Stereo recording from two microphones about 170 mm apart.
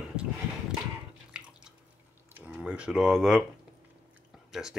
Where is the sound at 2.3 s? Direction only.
10° right (ahead or behind).